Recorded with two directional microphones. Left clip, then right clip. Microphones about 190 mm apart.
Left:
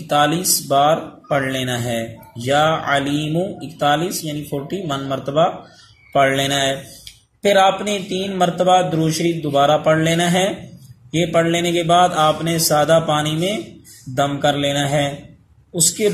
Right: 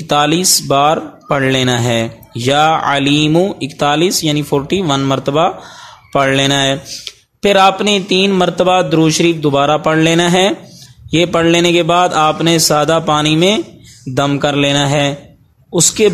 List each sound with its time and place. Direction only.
0.1 s speech: 45° right (ahead or behind)